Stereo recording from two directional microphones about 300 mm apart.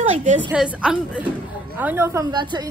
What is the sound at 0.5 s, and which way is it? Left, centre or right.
A woman's voice, centre.